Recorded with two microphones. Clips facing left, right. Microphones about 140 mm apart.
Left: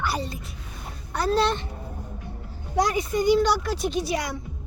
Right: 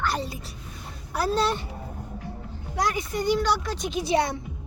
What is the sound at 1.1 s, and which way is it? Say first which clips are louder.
Speech: left 2 dB; 5° right (ahead or behind).